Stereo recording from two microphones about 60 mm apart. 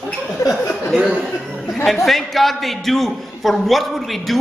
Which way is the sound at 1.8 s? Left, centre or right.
Centre.